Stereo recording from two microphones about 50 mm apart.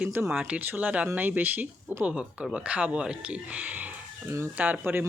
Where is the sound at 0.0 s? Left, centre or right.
Right.